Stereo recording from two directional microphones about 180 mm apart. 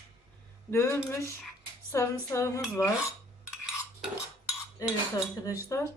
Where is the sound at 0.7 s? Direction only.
15° left (ahead or behind).